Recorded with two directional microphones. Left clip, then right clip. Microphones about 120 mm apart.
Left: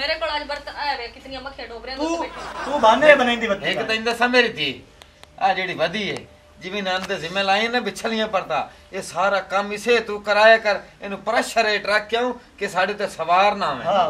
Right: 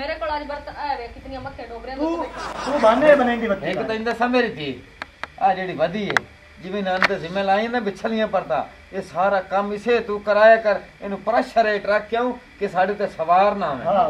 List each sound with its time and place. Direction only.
0.0 s speech: 20° left (ahead or behind)